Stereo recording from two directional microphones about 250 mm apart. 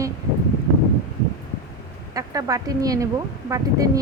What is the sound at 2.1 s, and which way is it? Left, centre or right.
A woman's voice, centre.